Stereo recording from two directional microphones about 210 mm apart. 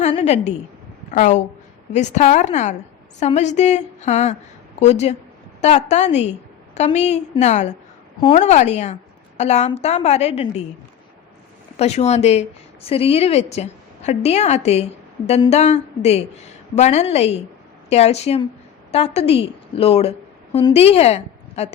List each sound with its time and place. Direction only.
0.0 s a sound: 30° left (ahead or behind)
1.1 s a woman's voice: 35° left (ahead or behind)
11.8 s a woman's voice: 30° left (ahead or behind)